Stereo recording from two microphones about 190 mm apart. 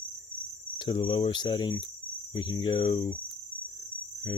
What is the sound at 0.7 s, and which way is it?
Speech, 25° left (ahead or behind).